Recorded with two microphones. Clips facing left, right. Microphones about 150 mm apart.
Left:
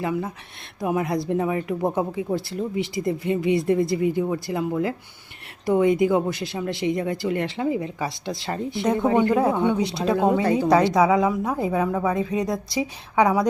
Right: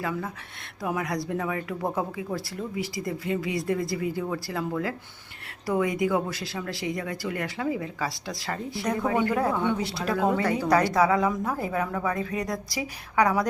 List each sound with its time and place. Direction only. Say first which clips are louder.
0.0 s speech: left 5 dB; 20° left (ahead or behind)